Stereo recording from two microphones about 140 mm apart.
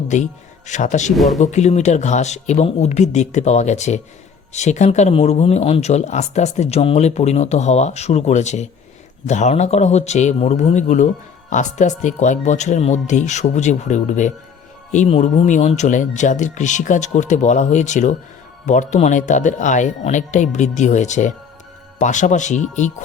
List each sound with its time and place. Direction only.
0.7 s speech: 60° left (ahead or behind)
1.1 s speech: centre (ahead or behind)
1.4 s speech: 55° left (ahead or behind)